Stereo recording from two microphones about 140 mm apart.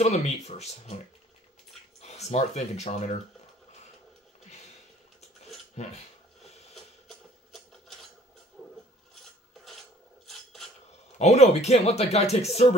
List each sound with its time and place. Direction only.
0.0 s speech: 50° left (ahead or behind)
2.0 s speech: 50° left (ahead or behind)
6.7 s a sound: centre (ahead or behind)
10.2 s cutlery: centre (ahead or behind)
11.1 s speech: 50° left (ahead or behind)